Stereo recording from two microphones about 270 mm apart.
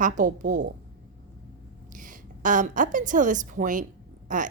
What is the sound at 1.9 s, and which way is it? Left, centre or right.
A woman's voice, right.